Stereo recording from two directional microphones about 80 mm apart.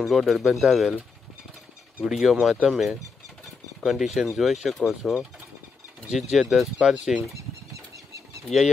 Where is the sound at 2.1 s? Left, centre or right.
Centre.